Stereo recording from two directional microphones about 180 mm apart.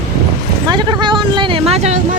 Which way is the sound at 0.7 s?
25° right (ahead or behind).